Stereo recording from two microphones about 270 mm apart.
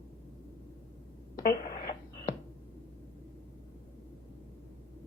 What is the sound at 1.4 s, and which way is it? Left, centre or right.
Radio, left.